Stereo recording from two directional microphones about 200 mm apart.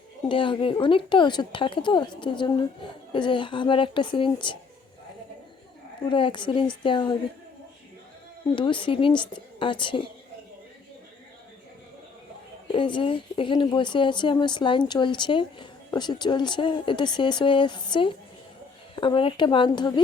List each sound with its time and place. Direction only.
0.3 s speech: 25° left (ahead or behind)
6.1 s speech: 25° left (ahead or behind)
8.5 s speech: 25° left (ahead or behind)
12.6 s speech: 25° left (ahead or behind)